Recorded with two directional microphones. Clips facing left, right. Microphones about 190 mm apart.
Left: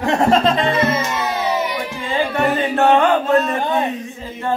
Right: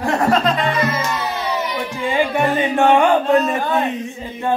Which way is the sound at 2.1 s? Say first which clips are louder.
Even; 15° right (ahead or behind).